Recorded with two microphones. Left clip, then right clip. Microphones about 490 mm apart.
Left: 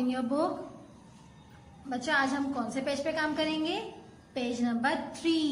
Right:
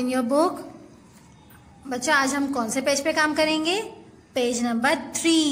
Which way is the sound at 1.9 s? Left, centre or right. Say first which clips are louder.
Right 7 dB; centre.